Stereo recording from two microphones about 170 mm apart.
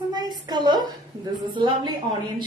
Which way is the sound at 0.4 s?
25° right (ahead or behind).